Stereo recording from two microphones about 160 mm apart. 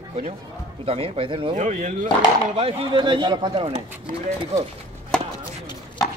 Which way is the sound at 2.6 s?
30° right (ahead or behind).